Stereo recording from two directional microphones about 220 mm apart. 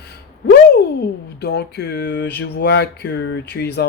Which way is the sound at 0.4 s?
50° left (ahead or behind).